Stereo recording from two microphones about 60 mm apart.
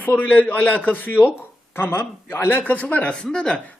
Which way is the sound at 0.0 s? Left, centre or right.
Left.